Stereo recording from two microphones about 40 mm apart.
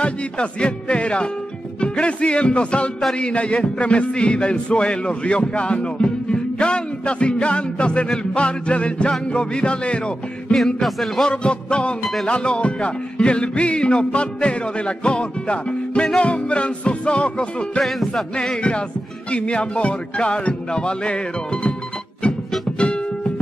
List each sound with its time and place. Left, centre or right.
0.0 s music: left
10.8 s music: centre
11.2 s music: left
22.8 s music: left